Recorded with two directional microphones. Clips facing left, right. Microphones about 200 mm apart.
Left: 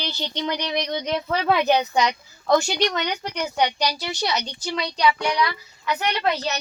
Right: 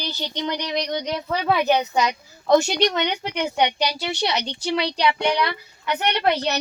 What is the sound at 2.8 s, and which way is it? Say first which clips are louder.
Speech: right 2 dB; 25° right (ahead or behind).